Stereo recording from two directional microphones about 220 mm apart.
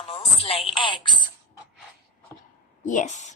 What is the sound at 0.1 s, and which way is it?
Speech, 25° left (ahead or behind).